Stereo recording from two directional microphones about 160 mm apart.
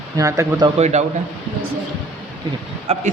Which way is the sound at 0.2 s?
20° right (ahead or behind).